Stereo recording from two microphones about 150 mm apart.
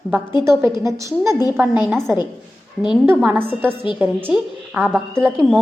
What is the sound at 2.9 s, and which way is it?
Speech, 10° right (ahead or behind).